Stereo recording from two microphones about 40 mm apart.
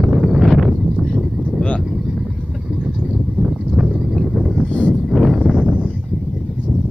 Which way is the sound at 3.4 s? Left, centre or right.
Centre.